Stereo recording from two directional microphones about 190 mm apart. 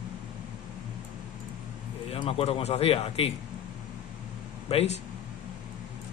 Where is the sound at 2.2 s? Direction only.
30° left (ahead or behind).